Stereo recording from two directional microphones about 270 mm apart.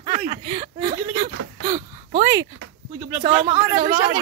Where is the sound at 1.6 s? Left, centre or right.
Centre.